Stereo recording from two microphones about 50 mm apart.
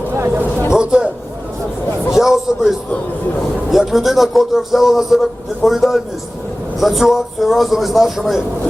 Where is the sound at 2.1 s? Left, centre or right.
Centre.